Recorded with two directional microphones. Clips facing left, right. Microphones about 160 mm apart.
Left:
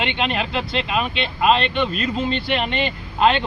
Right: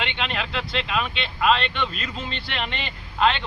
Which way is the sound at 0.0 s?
10° left (ahead or behind).